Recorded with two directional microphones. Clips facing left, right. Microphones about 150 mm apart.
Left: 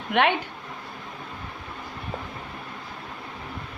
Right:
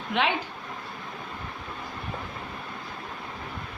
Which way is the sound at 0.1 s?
60° left (ahead or behind).